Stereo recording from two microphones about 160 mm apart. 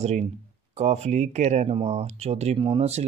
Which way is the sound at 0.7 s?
45° right (ahead or behind).